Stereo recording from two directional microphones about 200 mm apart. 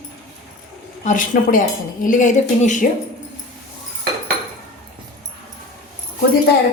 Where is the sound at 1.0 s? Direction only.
40° left (ahead or behind).